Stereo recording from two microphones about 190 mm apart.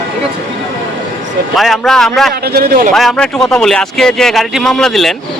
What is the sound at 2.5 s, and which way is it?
Speech, 50° right (ahead or behind).